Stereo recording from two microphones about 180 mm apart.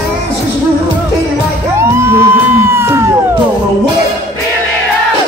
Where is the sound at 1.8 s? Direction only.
15° right (ahead or behind).